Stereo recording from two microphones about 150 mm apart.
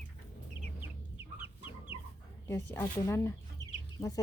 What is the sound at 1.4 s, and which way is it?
Chicken, 10° right (ahead or behind).